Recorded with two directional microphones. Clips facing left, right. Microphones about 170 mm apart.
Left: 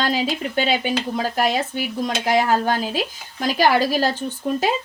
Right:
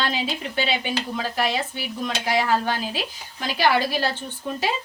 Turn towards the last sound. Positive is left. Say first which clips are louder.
# left 5 dB
turn(degrees=40)  # may be behind; listen again after turning